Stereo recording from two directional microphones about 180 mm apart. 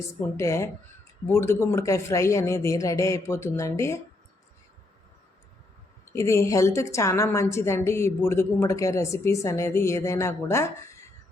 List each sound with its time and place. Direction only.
0.2 s a woman's voice: 15° left (ahead or behind)
6.1 s a woman's voice: 15° left (ahead or behind)